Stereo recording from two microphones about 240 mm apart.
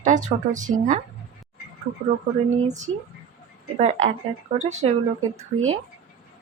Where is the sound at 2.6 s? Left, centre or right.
Right.